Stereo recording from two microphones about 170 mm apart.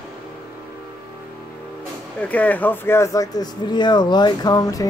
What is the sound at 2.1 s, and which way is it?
Speech, 10° left (ahead or behind).